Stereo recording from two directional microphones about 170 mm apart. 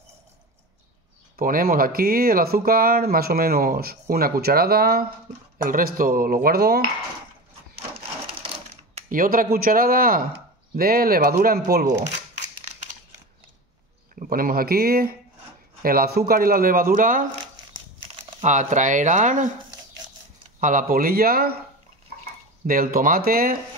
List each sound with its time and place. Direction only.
1.3 s speech: 55° right (ahead or behind)
8.9 s speech: 55° right (ahead or behind)
14.2 s speech: 60° right (ahead or behind)
18.4 s speech: 45° right (ahead or behind)
20.6 s speech: 55° right (ahead or behind)
22.7 s speech: 55° right (ahead or behind)